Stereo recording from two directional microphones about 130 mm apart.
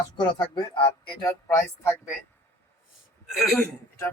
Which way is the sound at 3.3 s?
Centre (ahead or behind).